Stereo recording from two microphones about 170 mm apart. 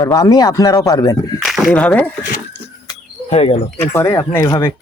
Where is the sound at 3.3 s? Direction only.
35° left (ahead or behind).